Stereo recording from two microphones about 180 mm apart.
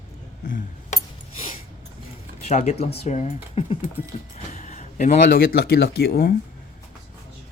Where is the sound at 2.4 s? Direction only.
35° left (ahead or behind); by 6.3 s 60° left (ahead or behind).